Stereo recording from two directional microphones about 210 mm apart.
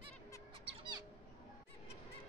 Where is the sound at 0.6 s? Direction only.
25° right (ahead or behind).